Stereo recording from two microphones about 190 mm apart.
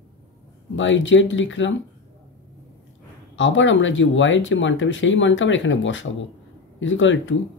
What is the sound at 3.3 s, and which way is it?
Speech, 85° left.